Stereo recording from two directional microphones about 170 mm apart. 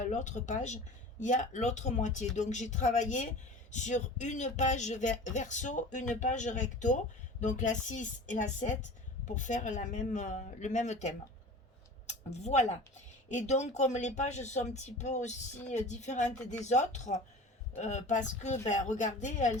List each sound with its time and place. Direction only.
0.1 s speech: 45° left (ahead or behind)